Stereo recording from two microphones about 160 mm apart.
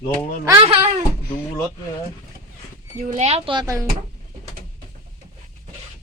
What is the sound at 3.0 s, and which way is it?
Speech, 50° right (ahead or behind).